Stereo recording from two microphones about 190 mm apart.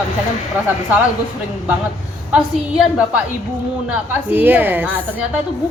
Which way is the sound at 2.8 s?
5° right (ahead or behind).